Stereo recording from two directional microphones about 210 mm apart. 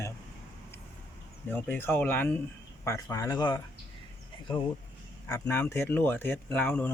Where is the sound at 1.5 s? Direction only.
10° left (ahead or behind).